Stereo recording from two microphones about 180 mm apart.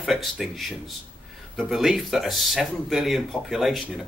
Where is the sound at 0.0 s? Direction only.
Centre (ahead or behind).